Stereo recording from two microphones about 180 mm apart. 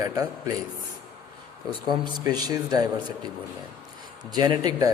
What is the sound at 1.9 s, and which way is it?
A man's voice, 25° right (ahead or behind).